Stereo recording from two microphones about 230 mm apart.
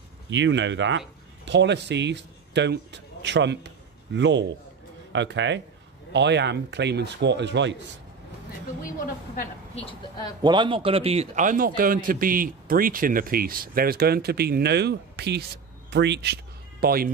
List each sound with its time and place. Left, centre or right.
0.3 s a man's voice: right
9.0 s a woman's voice: left
10.4 s a man's voice: centre; by 17.1 s right